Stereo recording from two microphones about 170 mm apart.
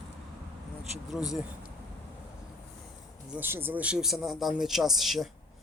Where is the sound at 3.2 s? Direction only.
10° right (ahead or behind).